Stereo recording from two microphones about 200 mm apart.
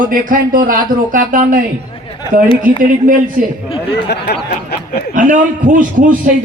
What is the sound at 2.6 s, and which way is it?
Speech, 45° right (ahead or behind).